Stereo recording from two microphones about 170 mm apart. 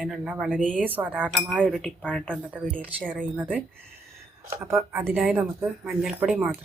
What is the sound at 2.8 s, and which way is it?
Speech, 10° right (ahead or behind).